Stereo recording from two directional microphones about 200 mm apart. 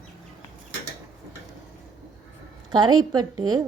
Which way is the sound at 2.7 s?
20° right (ahead or behind).